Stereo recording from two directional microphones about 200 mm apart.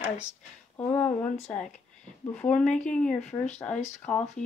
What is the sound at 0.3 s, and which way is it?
Speech, 10° left (ahead or behind).